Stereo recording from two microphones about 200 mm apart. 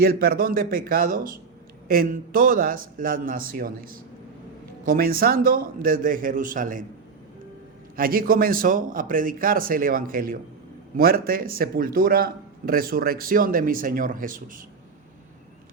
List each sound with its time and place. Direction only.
0.0 s a man's voice: 50° right (ahead or behind)
7.9 s a man's voice: 45° right (ahead or behind)